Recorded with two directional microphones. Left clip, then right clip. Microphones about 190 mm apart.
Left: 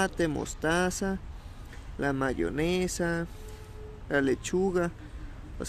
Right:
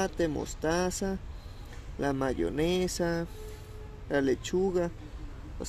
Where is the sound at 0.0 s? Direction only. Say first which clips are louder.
Left 2 dB; 20° left (ahead or behind).